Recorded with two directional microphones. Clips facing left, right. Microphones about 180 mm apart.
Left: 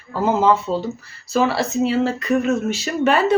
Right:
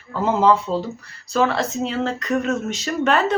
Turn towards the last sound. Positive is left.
turn(degrees=10)  # may be behind; listen again after turning